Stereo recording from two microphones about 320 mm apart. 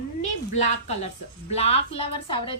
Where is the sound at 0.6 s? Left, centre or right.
Left.